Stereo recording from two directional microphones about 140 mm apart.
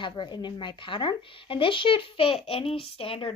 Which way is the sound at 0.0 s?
35° left (ahead or behind).